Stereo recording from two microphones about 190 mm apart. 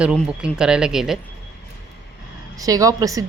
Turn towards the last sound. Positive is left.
turn(degrees=-20)  # may be behind; listen again after turning